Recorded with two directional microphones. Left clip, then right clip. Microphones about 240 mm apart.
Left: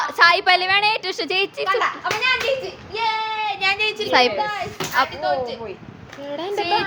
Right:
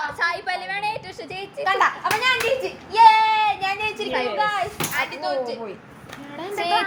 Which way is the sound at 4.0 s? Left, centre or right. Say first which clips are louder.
Left 8 dB; left.